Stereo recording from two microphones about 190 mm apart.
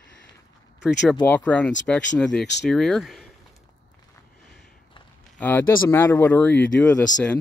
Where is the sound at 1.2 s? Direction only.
10° left (ahead or behind).